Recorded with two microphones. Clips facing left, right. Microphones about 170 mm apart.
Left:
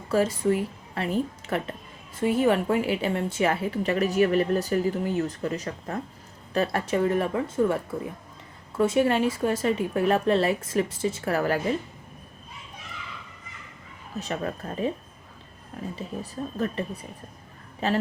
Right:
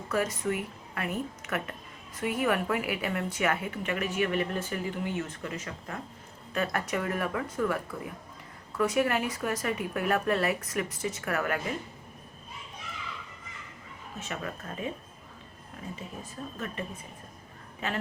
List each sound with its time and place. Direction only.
0.1 s a woman's voice: 30° left (ahead or behind)
14.2 s a woman's voice: 35° left (ahead or behind)
16.0 s a woman's voice: 35° left (ahead or behind)